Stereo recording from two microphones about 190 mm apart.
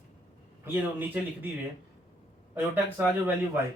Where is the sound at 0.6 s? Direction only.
10° right (ahead or behind).